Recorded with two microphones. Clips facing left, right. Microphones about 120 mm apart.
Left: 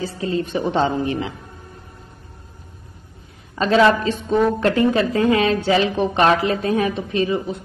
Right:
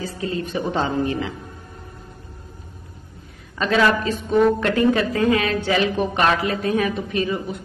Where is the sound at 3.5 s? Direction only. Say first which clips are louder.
Left 3 dB; 30° left (ahead or behind).